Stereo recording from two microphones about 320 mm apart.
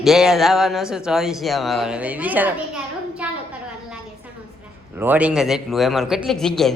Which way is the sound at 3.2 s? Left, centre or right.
Centre.